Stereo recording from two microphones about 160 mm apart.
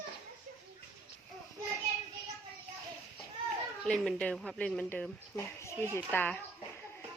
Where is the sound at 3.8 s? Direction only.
5° left (ahead or behind).